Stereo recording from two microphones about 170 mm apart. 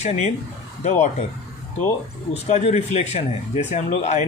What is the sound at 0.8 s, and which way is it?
Speech, 40° left (ahead or behind).